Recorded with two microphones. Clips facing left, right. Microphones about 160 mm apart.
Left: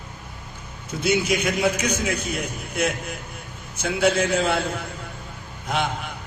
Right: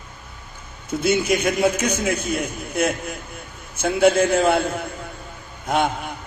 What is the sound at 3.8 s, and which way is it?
Speech, 50° right (ahead or behind).